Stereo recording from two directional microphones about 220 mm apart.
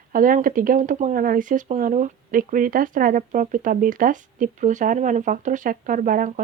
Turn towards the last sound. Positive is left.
turn(degrees=-35)  # may be behind; listen again after turning